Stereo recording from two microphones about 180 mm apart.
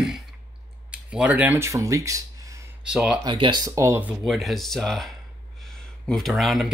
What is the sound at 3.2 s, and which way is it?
Speech, 25° right (ahead or behind).